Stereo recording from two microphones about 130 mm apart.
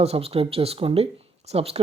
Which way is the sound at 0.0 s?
50° right (ahead or behind).